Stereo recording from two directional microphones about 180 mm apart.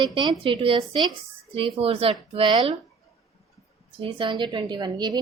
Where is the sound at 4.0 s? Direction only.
30° right (ahead or behind).